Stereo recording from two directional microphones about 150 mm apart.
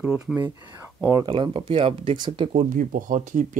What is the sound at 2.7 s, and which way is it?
Speech, 65° right (ahead or behind).